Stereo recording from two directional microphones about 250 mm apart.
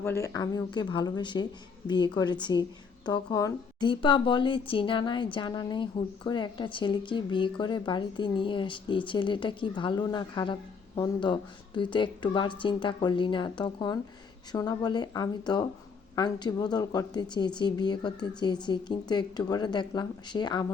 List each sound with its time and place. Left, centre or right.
0.0 s a woman's voice: centre